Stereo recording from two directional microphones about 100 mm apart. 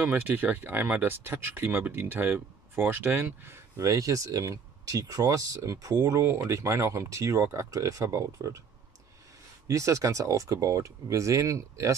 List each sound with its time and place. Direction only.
0.0 s speech: 20° right (ahead or behind); by 8.5 s 35° right (ahead or behind)
9.7 s speech: 30° right (ahead or behind)